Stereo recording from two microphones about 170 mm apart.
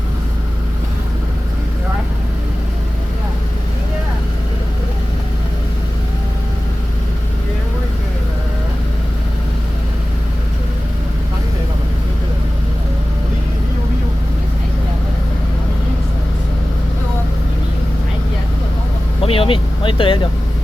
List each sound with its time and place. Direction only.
19.2 s vehicle: 35° left (ahead or behind)